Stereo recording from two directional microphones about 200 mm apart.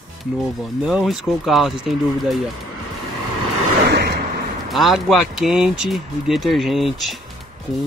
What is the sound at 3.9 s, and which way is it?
Vehicle, 55° right (ahead or behind).